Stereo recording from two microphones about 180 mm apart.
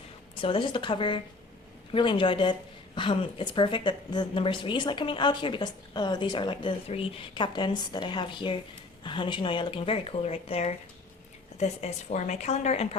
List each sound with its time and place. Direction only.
0.4 s a woman's voice: 30° left (ahead or behind)